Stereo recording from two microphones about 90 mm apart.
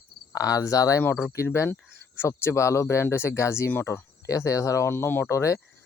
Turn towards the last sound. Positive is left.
turn(degrees=35)  # may be behind; listen again after turning